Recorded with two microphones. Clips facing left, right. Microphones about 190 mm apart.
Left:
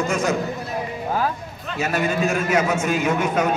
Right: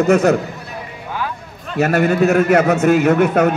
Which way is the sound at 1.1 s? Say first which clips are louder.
Left 2 dB; 35° left (ahead or behind).